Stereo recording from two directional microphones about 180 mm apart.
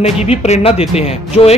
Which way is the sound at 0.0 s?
35° left (ahead or behind).